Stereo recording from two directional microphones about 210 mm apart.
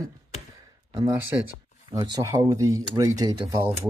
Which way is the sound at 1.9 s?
20° right (ahead or behind).